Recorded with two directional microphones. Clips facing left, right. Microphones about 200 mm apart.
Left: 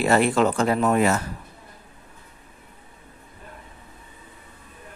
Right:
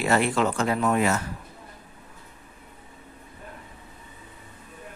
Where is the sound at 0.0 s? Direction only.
40° left (ahead or behind).